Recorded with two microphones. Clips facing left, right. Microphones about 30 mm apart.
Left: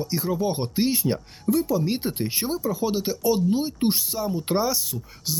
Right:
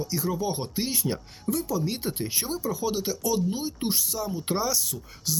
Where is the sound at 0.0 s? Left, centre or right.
Left.